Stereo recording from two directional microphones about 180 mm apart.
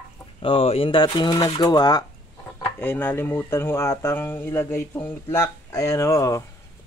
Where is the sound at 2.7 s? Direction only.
10° left (ahead or behind).